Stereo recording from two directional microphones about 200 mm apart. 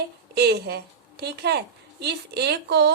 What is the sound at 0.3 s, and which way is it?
A woman's voice, 55° right (ahead or behind).